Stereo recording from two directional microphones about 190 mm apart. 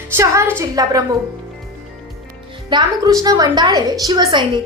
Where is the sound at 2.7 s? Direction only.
25° right (ahead or behind).